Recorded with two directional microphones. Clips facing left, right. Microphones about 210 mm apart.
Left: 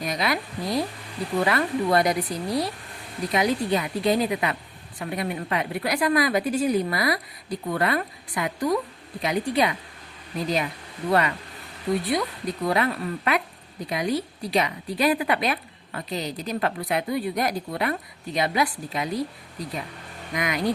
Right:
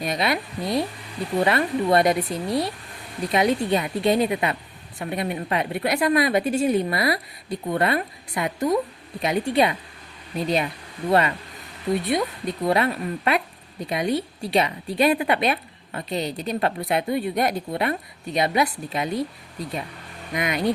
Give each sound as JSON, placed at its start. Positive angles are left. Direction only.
{"t": 0.0, "sound": "a woman's voice", "side_deg": -25}
{"t": 12.0, "sound": "a woman's voice", "side_deg": -25}
{"t": 20.3, "sound": "a woman's voice", "side_deg": -25}